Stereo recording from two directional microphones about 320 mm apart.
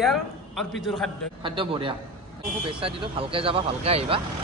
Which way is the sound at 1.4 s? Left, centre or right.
Centre.